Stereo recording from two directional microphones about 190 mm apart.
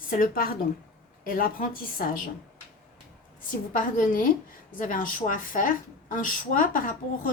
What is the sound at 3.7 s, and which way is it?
A woman's voice, 45° left (ahead or behind).